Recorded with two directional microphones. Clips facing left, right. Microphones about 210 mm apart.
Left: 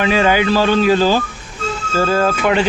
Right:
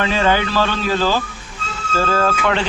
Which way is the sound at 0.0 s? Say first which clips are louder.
Left 3 dB; 15° left (ahead or behind).